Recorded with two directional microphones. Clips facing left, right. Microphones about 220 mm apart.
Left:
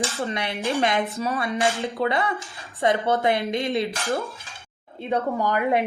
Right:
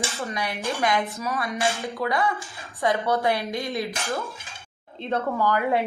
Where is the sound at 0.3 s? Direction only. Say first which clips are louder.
Left 2 dB; 25° left (ahead or behind).